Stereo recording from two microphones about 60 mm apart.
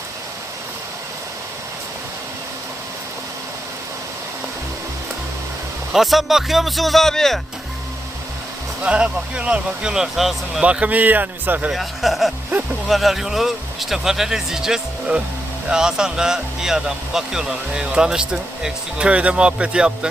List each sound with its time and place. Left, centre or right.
5.9 s speech: centre
8.8 s speech: centre
10.6 s speech: right
11.7 s speech: centre
12.5 s speech: right
12.9 s speech: centre